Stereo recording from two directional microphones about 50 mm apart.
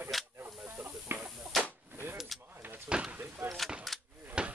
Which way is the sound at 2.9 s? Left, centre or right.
Right.